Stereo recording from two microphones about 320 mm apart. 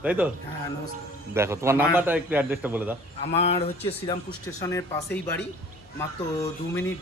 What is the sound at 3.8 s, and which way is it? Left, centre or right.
Speech, centre.